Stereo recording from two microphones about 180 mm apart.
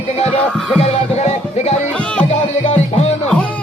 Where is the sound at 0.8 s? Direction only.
35° left (ahead or behind).